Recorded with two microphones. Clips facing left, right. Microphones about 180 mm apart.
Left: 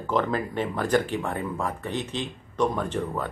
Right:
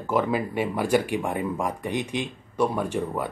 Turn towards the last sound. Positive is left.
turn(degrees=-10)  # may be behind; listen again after turning